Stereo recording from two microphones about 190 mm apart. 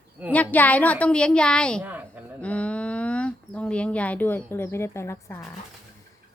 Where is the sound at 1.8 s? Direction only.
10° right (ahead or behind).